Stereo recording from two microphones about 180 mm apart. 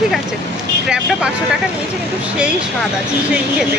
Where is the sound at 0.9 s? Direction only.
5° right (ahead or behind).